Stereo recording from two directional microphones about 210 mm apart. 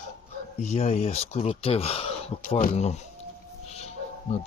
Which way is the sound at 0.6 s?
30° left (ahead or behind).